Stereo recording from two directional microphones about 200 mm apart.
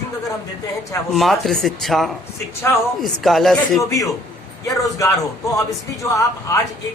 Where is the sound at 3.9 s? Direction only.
15° left (ahead or behind).